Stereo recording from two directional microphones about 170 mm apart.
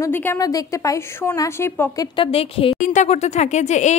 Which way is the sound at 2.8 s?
45° left (ahead or behind).